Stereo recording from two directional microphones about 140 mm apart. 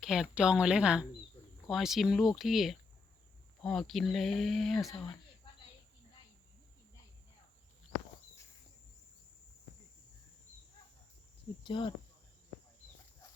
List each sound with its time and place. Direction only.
0.0 s speech: 5° right (ahead or behind)
11.6 s speech: 35° left (ahead or behind)